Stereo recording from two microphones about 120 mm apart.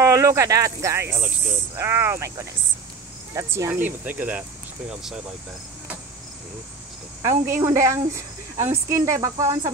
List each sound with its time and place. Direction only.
0.0 s a woman's voice: 25° right (ahead or behind); by 5.2 s 5° right (ahead or behind)
7.2 s a woman's voice: 25° right (ahead or behind)